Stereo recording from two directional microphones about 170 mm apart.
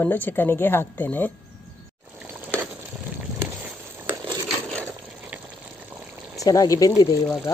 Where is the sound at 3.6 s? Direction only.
10° right (ahead or behind).